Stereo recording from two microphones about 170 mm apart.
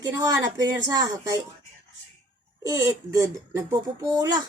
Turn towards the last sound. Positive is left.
turn(degrees=-20)  # may be behind; listen again after turning